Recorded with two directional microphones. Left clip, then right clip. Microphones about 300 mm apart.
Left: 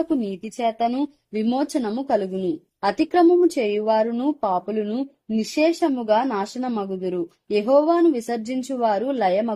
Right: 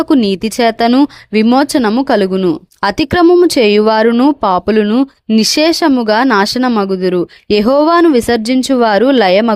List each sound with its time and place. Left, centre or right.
0.0 s speech: right